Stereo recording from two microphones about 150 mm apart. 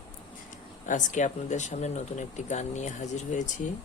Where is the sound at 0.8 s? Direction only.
55° left (ahead or behind).